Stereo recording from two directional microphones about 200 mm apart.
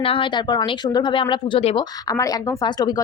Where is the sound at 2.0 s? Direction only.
15° left (ahead or behind).